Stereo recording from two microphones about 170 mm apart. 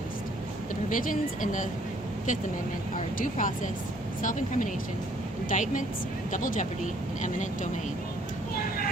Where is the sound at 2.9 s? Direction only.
50° left (ahead or behind).